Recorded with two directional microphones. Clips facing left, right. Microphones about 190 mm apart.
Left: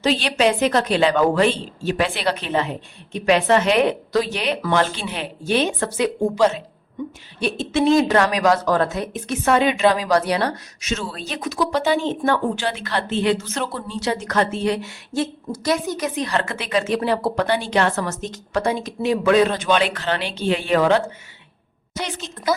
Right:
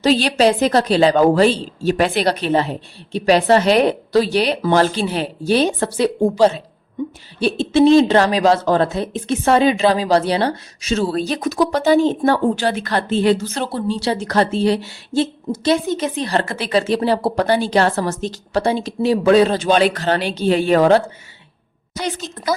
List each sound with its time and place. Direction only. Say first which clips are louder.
0.0 s a woman's voice: right 4 dB; 40° right (ahead or behind)